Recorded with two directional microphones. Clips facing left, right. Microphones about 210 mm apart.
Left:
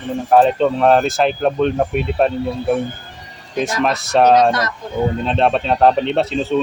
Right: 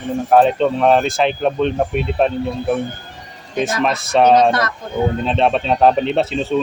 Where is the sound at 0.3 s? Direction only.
Centre (ahead or behind).